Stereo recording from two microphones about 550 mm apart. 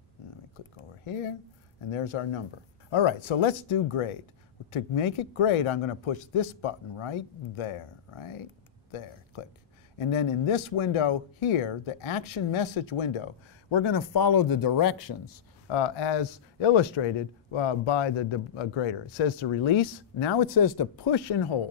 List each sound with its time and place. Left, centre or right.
0.7 s a sound: left
1.9 s speech: left
10.8 s speech: left
15.7 s speech: left
20.5 s speech: left
21.3 s speech: left